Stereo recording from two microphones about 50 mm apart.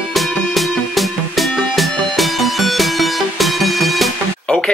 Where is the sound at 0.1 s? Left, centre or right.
Centre.